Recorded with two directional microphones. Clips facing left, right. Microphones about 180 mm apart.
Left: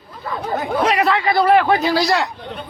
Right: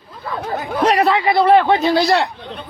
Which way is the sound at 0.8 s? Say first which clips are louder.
Right 4 dB; 35° right (ahead or behind).